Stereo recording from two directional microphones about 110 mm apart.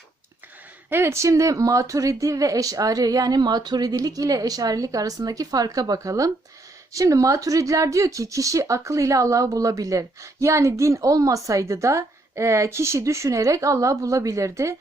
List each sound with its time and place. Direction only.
0.9 s speech: 20° right (ahead or behind)